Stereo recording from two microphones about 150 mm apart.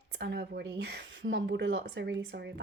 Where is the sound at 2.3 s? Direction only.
90° right.